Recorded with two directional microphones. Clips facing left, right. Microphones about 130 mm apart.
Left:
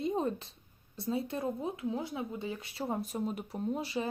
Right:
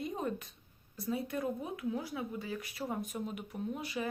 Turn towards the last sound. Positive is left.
turn(degrees=30)  # may be behind; listen again after turning